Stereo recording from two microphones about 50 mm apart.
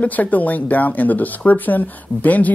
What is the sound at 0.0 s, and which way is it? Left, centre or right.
Speech, left.